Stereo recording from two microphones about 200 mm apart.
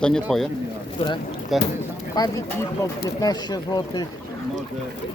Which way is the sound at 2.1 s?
15° left (ahead or behind).